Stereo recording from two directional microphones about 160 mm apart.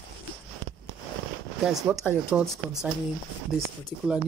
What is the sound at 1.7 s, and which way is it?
Speech, centre (ahead or behind).